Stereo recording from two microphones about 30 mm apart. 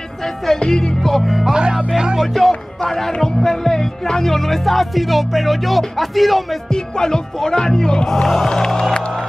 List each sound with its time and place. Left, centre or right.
0.6 s speech: left
1.0 s music: centre
1.5 s speech: right
2.1 s music: centre
2.8 s speech: centre
3.3 s music: centre
6.7 s speech: left
8.5 s speech: left